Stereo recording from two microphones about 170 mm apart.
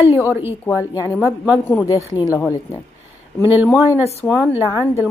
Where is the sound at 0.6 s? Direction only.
20° left (ahead or behind).